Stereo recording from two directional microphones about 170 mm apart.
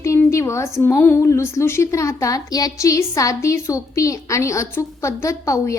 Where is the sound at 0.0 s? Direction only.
20° left (ahead or behind).